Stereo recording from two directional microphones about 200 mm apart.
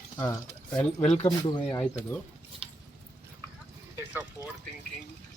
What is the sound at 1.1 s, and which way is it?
Speech, 25° left (ahead or behind).